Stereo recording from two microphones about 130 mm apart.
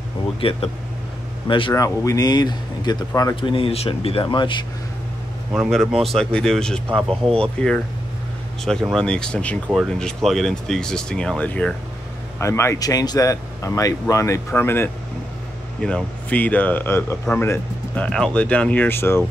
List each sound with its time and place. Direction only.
0.4 s speech: 45° left (ahead or behind)
1.7 s speech: 25° left (ahead or behind)
5.5 s speech: centre (ahead or behind)
8.9 s speech: 5° left (ahead or behind)
12.4 s speech: 20° left (ahead or behind)